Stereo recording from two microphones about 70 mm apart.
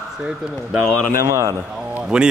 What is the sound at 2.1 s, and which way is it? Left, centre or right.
Speech, centre.